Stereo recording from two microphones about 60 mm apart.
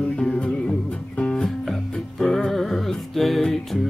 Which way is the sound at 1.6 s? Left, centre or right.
Centre.